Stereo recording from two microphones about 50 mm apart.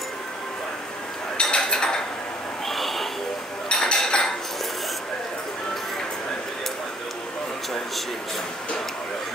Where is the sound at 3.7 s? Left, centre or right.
Centre.